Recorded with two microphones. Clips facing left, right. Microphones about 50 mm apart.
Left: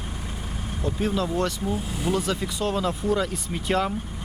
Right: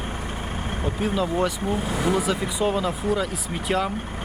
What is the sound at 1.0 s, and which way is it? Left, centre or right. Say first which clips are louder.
Speech: right 2 dB; centre.